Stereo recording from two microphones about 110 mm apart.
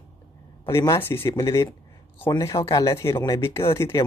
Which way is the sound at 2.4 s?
30° left (ahead or behind).